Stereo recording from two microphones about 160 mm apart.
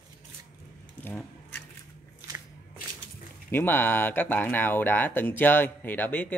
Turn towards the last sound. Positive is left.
turn(degrees=10)  # may be behind; listen again after turning